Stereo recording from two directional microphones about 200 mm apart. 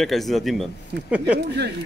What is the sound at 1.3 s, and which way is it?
Speech, 55° right (ahead or behind).